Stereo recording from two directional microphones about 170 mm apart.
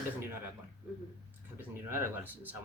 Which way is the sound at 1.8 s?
15° right (ahead or behind).